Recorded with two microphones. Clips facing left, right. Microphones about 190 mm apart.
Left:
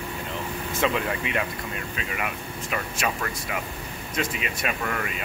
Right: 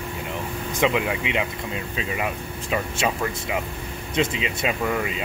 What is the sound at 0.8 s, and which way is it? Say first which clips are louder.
Speech: right 3 dB; 15° right (ahead or behind).